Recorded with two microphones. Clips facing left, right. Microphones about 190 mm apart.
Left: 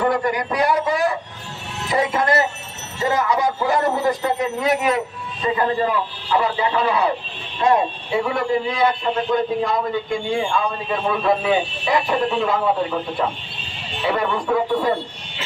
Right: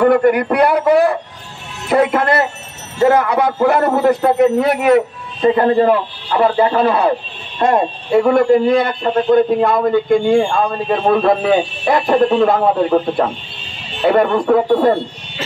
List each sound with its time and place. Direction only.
0.0 s speech: 60° right (ahead or behind)